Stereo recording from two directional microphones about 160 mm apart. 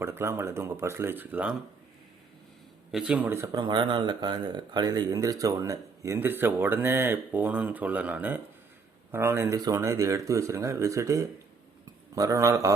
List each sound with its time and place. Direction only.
0.0 s speech: 15° right (ahead or behind)
2.9 s speech: 5° right (ahead or behind)